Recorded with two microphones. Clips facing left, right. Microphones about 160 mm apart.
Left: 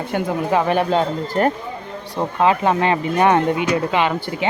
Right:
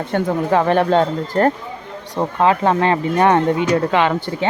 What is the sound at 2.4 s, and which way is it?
Speech, 15° left (ahead or behind).